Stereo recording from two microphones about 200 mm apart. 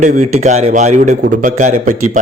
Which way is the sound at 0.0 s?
35° right (ahead or behind).